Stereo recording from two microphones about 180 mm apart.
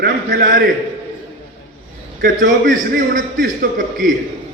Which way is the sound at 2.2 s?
50° right (ahead or behind).